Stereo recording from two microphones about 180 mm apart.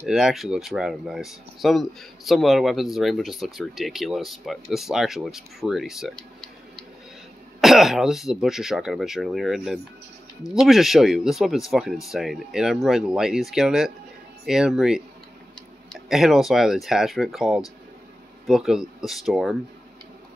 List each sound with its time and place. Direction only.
0.0 s speech: centre (ahead or behind)
7.6 s speech: centre (ahead or behind)